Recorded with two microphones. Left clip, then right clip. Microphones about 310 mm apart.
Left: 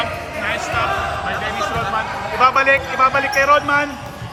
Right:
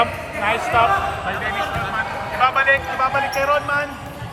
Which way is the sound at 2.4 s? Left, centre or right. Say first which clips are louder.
Left 3 dB; centre.